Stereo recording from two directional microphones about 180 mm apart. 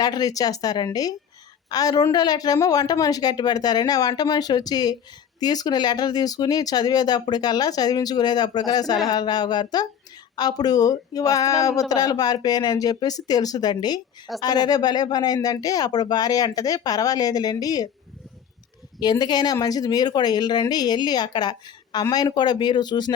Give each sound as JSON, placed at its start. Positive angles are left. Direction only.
{"t": 0.0, "sound": "speech", "side_deg": 20}
{"t": 18.9, "sound": "speech", "side_deg": 25}